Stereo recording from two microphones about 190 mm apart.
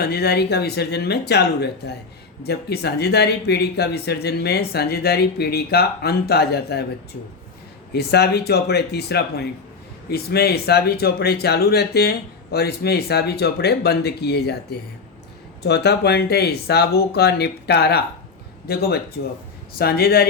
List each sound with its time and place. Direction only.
0.0 s speech: 55° left (ahead or behind)
7.9 s speech: 55° left (ahead or behind)